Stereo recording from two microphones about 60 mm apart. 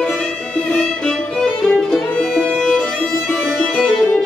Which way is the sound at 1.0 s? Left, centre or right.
Centre.